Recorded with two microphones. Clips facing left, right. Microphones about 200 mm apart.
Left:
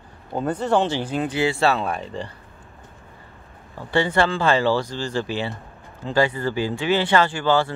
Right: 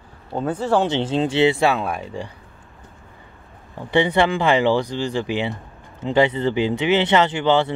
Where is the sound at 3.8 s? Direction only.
20° right (ahead or behind).